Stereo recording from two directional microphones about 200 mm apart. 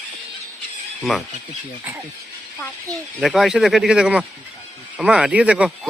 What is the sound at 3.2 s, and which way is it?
Speech, centre (ahead or behind).